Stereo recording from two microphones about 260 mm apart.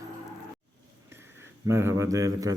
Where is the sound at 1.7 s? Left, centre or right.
Centre.